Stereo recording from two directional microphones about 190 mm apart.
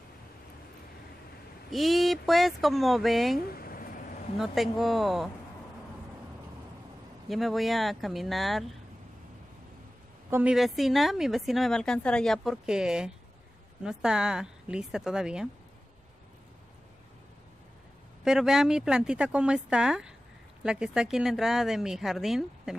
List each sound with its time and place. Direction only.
1.7 s a woman's voice: centre (ahead or behind)
3.5 s a sound: 50° left (ahead or behind)
4.4 s a woman's voice: centre (ahead or behind)
7.2 s a woman's voice: centre (ahead or behind)
10.3 s a woman's voice: 5° right (ahead or behind)
18.2 s a woman's voice: 5° right (ahead or behind)